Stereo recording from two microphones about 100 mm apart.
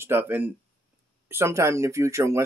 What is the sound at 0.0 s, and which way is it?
Speech, 20° right (ahead or behind).